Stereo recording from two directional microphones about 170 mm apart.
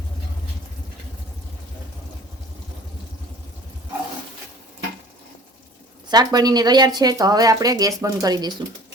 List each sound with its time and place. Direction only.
6.1 s speech: 25° right (ahead or behind)